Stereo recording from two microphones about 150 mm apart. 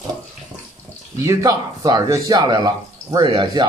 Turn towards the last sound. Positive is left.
turn(degrees=-30)  # may be behind; listen again after turning